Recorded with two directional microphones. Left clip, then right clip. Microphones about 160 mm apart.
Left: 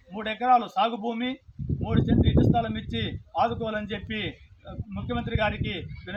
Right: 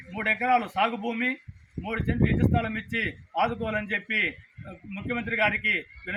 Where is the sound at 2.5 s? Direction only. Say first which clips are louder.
Even; centre (ahead or behind).